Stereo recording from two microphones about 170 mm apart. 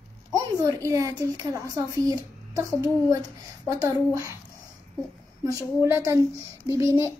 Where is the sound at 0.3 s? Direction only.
20° right (ahead or behind).